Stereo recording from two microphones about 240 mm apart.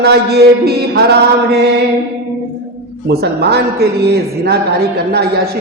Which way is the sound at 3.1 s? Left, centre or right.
Right.